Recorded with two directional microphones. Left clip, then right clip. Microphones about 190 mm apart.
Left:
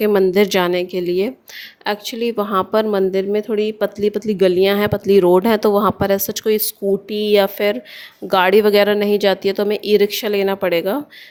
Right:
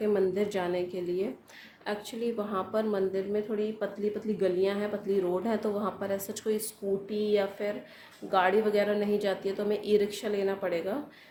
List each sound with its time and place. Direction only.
0.0 s speech: 50° left (ahead or behind)